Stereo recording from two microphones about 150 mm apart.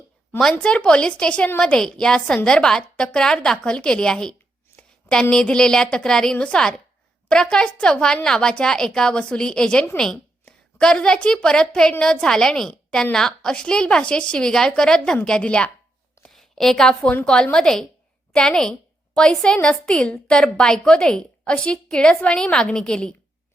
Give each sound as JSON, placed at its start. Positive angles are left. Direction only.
{"t": 0.3, "sound": "a woman's voice", "side_deg": 5}